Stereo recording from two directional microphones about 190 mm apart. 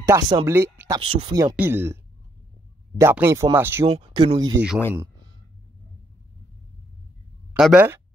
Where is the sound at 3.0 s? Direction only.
15° right (ahead or behind).